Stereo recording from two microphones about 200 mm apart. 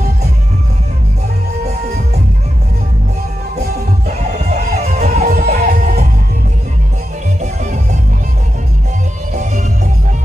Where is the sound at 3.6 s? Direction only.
40° right (ahead or behind).